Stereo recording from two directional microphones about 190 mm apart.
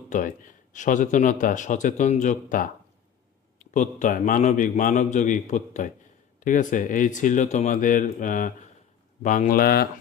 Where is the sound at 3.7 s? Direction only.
40° left (ahead or behind).